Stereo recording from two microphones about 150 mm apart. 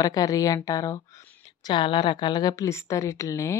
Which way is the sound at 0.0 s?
25° left (ahead or behind).